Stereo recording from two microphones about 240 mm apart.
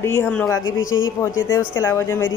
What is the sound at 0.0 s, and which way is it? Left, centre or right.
Speech, centre.